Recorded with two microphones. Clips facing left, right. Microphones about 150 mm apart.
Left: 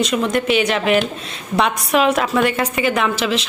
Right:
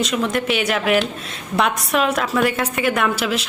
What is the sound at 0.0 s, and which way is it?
A woman's voice, centre (ahead or behind).